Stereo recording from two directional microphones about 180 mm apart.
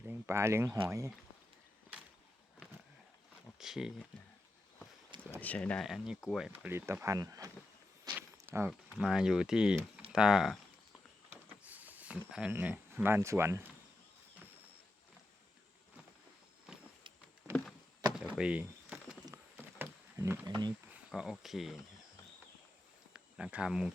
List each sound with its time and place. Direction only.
0.0 s speech: 15° right (ahead or behind)
3.6 s speech: 5° right (ahead or behind)
5.4 s speech: 10° left (ahead or behind)
6.5 s speech: 10° right (ahead or behind)
8.1 s a sound: 10° right (ahead or behind)
9.0 s speech: 5° right (ahead or behind)
11.3 s a sound: 10° right (ahead or behind)
17.2 s a sound: 10° right (ahead or behind)
20.9 s speech: 5° right (ahead or behind)
23.1 s speech: 5° right (ahead or behind)